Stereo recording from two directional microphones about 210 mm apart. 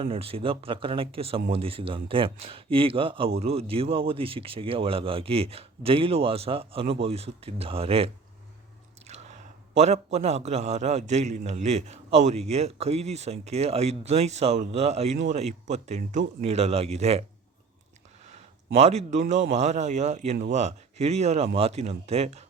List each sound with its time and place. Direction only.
0.0 s speech: 25° right (ahead or behind)
9.0 s chewing: 30° right (ahead or behind)
9.7 s a man's voice: 30° right (ahead or behind)
18.7 s a man's voice: 30° right (ahead or behind)